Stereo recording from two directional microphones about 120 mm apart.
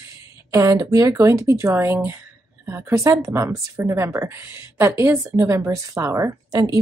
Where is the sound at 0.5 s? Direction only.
25° right (ahead or behind).